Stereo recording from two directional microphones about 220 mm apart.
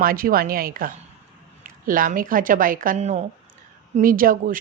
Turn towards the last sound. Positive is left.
turn(degrees=-40)  # may be behind; listen again after turning